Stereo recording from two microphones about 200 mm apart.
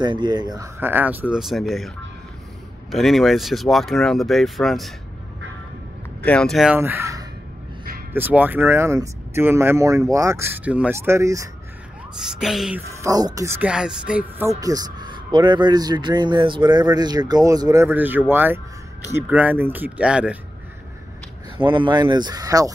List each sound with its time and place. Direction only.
0.0 s speech: 20° right (ahead or behind); by 1.9 s centre (ahead or behind)
2.9 s speech: centre (ahead or behind)
6.2 s speech: 5° left (ahead or behind); by 11.4 s 15° right (ahead or behind)
12.2 s speech: centre (ahead or behind)
13.0 s speech: 15° right (ahead or behind)
14.6 s speech: 20° right (ahead or behind)
21.6 s speech: 25° right (ahead or behind)